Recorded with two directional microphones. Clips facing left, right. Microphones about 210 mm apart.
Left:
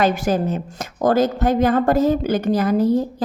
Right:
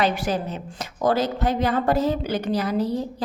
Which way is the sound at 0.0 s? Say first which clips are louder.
Left 5 dB; 45° left (ahead or behind).